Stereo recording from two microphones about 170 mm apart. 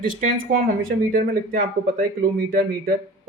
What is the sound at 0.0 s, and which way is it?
Speech, 50° right (ahead or behind).